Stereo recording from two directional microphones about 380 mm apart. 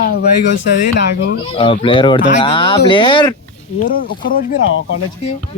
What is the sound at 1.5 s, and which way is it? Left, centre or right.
Speech, centre.